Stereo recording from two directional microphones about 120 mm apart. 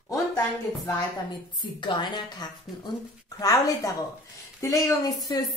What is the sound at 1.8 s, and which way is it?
A woman's voice, 40° left (ahead or behind).